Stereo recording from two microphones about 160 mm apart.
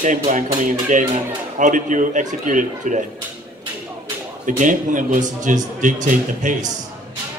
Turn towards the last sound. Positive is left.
turn(degrees=-50)  # may be behind; listen again after turning